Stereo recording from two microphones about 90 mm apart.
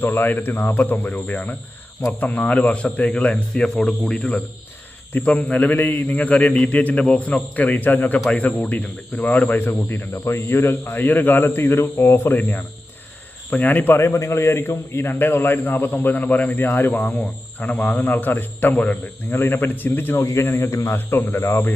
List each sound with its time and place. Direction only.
0.0 s a man's voice: 20° left (ahead or behind)
14.0 s a man's voice: 30° left (ahead or behind)